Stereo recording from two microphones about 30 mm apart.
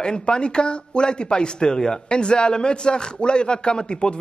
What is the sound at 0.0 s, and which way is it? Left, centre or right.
A man's voice, left.